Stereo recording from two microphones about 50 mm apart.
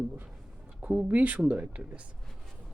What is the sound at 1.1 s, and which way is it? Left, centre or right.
Speech, right.